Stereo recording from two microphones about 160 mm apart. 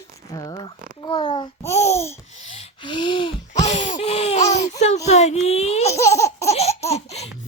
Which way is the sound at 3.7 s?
45° left (ahead or behind).